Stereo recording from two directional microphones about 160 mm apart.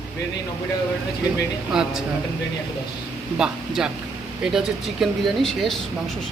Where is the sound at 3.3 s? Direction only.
5° right (ahead or behind).